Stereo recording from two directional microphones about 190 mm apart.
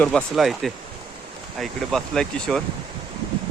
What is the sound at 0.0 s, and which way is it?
Speech, 5° left (ahead or behind).